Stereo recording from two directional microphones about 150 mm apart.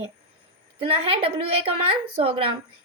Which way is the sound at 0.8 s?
40° right (ahead or behind).